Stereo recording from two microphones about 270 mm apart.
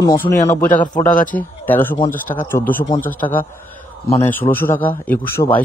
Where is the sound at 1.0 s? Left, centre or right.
Left.